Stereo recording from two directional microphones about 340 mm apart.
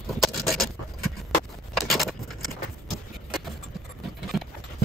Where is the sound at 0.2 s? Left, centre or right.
Centre.